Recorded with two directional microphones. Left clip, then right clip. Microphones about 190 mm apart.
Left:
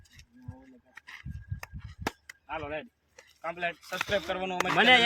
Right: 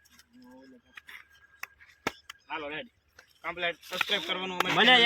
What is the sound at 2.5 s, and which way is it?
Speech, 55° left (ahead or behind).